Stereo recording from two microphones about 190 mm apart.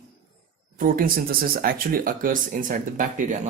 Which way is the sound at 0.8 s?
50° right (ahead or behind).